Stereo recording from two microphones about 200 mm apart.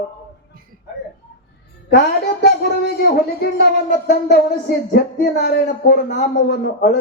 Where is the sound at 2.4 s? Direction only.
55° left (ahead or behind).